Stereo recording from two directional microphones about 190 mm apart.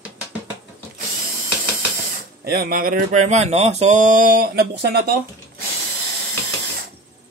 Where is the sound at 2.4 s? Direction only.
55° right (ahead or behind).